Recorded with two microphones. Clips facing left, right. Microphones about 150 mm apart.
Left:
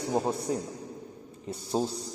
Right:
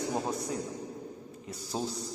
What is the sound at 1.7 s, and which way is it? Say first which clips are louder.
Speech: left 6 dB; 30° left (ahead or behind).